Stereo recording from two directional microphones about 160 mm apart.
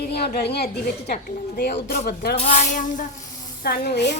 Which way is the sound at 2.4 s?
45° left (ahead or behind).